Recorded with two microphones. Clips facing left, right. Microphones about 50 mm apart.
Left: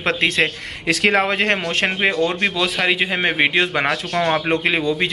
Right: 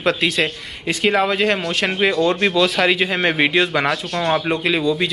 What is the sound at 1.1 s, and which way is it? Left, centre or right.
Speech, left.